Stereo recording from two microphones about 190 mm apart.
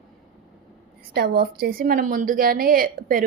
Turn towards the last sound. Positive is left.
turn(degrees=-50)  # may be behind; listen again after turning